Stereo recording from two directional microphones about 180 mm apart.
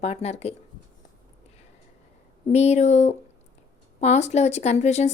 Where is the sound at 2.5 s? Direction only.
35° left (ahead or behind).